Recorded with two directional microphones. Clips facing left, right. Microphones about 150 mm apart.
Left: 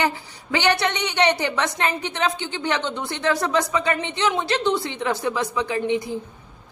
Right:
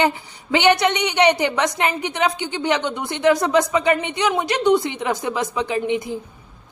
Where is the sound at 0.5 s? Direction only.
20° right (ahead or behind).